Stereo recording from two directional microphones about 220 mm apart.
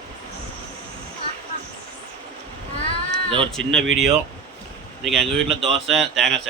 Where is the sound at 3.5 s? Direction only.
Centre (ahead or behind).